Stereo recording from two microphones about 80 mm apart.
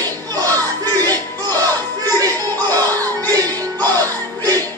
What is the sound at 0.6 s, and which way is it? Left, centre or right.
Crowd, right.